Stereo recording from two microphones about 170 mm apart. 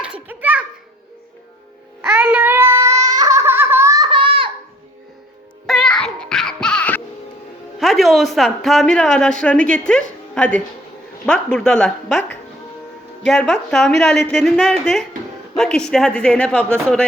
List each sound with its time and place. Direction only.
0.0 s a sound: 10° right (ahead or behind)
2.0 s baby laughter: 10° right (ahead or behind); by 4.5 s 30° right (ahead or behind)
5.6 s music: 5° left (ahead or behind)
7.8 s a woman's voice: centre (ahead or behind)